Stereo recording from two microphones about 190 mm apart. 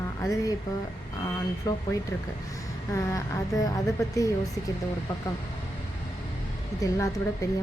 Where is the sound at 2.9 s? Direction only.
15° left (ahead or behind).